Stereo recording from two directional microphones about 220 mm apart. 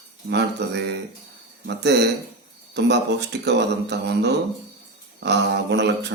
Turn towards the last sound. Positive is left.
turn(degrees=-50)  # may be behind; listen again after turning